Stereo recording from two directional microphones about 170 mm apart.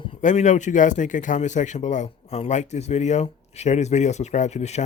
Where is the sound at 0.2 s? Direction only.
45° left (ahead or behind).